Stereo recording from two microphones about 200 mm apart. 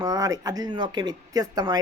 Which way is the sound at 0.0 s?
20° right (ahead or behind).